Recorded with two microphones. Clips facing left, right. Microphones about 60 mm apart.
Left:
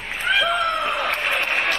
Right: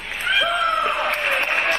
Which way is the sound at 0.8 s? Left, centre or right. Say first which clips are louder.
Right 1 dB; right.